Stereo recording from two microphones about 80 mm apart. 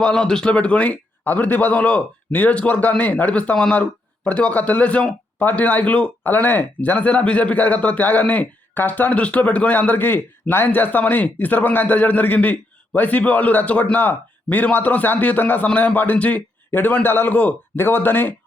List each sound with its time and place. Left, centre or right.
0.0 s a man's voice: centre; by 18.3 s left